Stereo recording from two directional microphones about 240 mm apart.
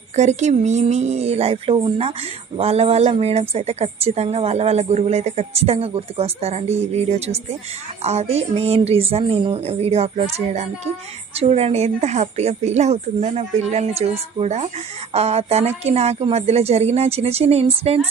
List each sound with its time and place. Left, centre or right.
0.2 s a woman's voice: right